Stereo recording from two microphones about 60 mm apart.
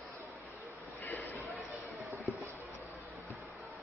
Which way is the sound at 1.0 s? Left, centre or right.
Left.